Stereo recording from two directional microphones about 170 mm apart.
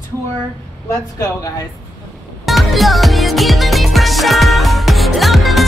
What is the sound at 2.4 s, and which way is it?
Music, centre (ahead or behind).